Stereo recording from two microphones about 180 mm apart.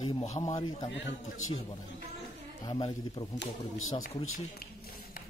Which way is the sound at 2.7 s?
25° left (ahead or behind).